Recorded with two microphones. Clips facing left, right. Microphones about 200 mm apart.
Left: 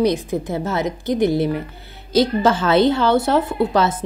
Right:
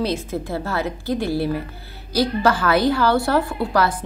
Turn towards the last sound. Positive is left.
turn(degrees=25)  # may be behind; listen again after turning